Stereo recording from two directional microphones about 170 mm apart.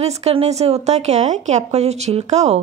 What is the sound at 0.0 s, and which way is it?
Speech, 40° right (ahead or behind).